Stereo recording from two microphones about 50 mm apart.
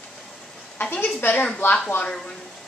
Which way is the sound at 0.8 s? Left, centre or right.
Left.